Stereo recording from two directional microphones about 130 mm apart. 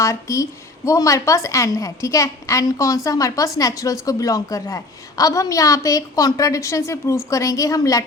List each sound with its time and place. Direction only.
0.0 s a woman's voice: 25° left (ahead or behind)